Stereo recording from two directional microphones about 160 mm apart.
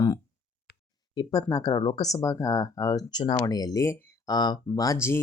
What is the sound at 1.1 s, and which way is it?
Speech, 25° left (ahead or behind).